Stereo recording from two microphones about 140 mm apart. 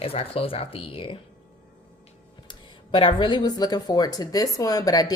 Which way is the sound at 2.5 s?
40° left (ahead or behind).